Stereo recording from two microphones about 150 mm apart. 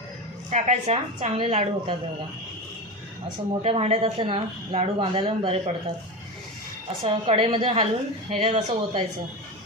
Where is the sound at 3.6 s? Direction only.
40° right (ahead or behind).